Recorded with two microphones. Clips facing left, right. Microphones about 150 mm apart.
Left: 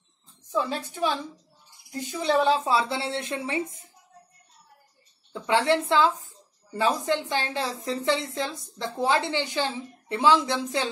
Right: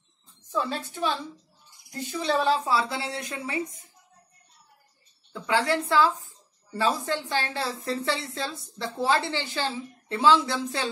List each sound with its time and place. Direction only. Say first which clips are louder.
0.5 s a woman's voice: left 1 dB; 15° left (ahead or behind)
5.3 s a woman's voice: left 2 dB; 25° left (ahead or behind)